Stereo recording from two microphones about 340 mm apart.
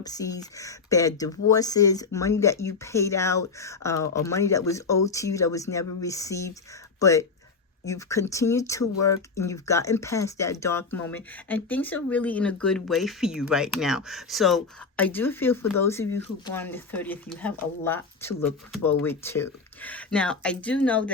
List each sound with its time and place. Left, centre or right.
0.0 s speech: centre
9.0 s speech: left
9.3 s speech: centre